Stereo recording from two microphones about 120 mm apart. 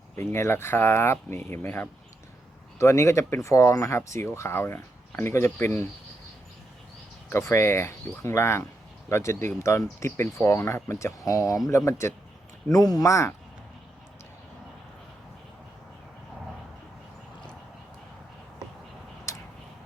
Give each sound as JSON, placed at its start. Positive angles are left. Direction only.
{"t": 0.2, "sound": "speech", "side_deg": 20}
{"t": 7.3, "sound": "speech", "side_deg": 20}
{"t": 19.3, "sound": "a sound", "side_deg": 25}